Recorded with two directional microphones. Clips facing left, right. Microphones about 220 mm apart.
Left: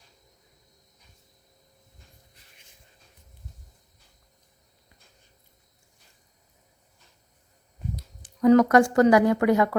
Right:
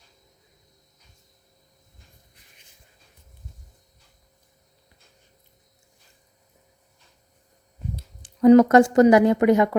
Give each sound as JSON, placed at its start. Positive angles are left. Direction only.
{"t": 7.9, "sound": "speech", "side_deg": -30}